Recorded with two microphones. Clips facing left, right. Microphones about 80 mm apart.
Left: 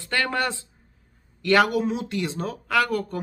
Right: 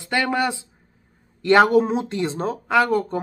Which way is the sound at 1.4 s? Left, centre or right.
Right.